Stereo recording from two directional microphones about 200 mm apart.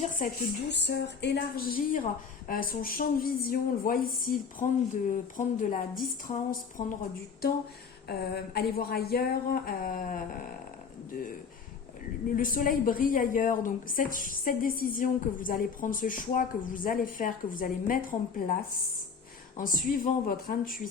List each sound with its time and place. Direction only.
0.7 s a woman's voice: 55° left (ahead or behind); by 6.8 s 40° left (ahead or behind)
8.0 s a woman's voice: 50° left (ahead or behind)
12.4 s a woman's voice: 45° left (ahead or behind)
19.5 s a woman's voice: 40° left (ahead or behind)